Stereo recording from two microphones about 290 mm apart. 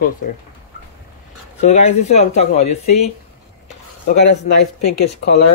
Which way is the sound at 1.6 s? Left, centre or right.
Left.